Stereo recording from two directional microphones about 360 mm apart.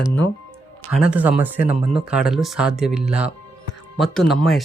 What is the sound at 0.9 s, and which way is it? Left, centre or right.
Speech, centre.